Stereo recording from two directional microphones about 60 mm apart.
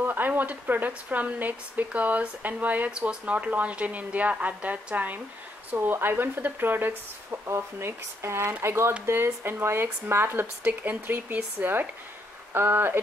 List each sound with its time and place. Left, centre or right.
0.0 s a sound: right
0.3 s speech: right
12.5 s speech: right